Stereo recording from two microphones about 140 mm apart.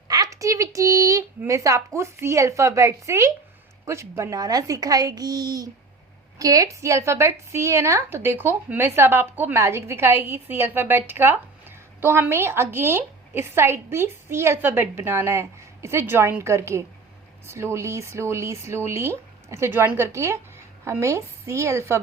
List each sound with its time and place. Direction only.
0.1 s a woman's voice: 25° right (ahead or behind)